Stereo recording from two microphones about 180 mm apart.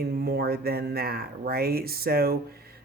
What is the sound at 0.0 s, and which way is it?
Speech, 60° right (ahead or behind).